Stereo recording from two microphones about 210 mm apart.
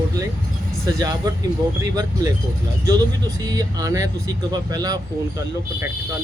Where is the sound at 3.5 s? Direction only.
15° right (ahead or behind).